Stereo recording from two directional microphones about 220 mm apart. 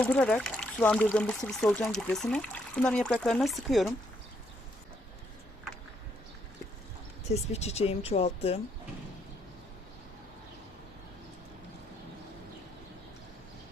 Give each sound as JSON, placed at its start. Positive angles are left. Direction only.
{"t": 0.0, "sound": "speech", "side_deg": 5}
{"t": 7.3, "sound": "speech", "side_deg": 30}